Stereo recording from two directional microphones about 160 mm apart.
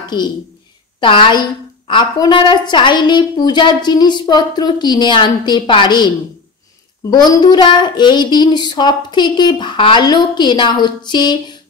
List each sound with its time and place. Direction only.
0.1 s a woman's voice: 30° left (ahead or behind)